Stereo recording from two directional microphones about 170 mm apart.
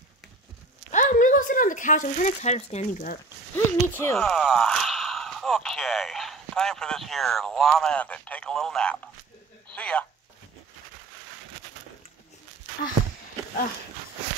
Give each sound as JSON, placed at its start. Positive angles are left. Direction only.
{"t": 0.9, "sound": "speech", "side_deg": 50}
{"t": 3.5, "sound": "speech", "side_deg": 15}
{"t": 4.2, "sound": "speech", "side_deg": 0}